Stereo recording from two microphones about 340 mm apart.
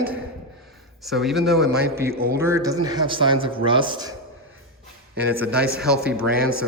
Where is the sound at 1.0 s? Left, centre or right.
Centre.